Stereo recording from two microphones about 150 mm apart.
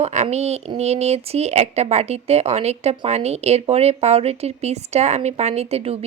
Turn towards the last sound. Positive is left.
turn(degrees=-45)  # may be behind; listen again after turning